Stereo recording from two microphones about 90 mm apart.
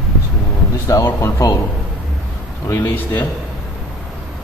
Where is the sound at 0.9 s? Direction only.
40° left (ahead or behind).